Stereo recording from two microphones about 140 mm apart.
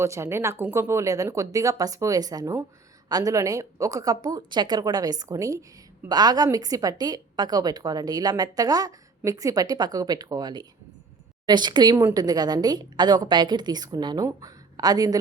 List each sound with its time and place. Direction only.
0.0 s a woman's voice: 20° right (ahead or behind)